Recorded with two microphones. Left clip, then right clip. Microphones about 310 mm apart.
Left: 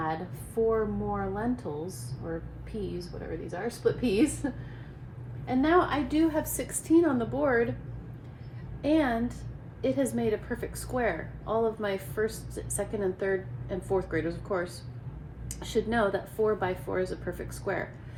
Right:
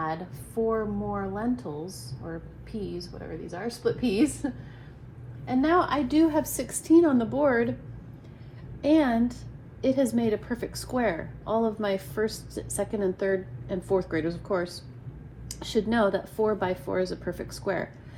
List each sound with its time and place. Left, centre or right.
0.0 s speech: centre
3.5 s speech: centre
8.8 s speech: centre